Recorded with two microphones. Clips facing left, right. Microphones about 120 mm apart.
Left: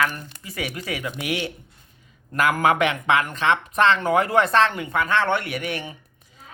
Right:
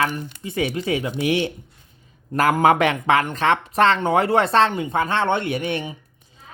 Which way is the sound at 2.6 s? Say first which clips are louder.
Right 4 dB; 35° right (ahead or behind).